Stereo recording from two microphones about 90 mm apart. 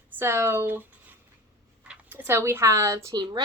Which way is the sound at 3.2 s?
50° right (ahead or behind).